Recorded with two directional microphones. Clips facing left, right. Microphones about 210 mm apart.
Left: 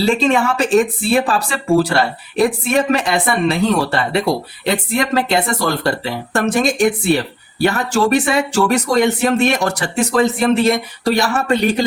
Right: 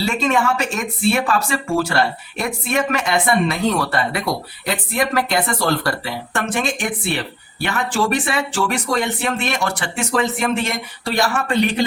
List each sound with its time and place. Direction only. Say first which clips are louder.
0.0 s speech: left 4 dB; 30° left (ahead or behind)
6.3 s speech: left 7 dB; 40° left (ahead or behind)